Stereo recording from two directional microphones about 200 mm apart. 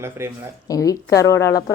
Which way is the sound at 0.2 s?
10° right (ahead or behind).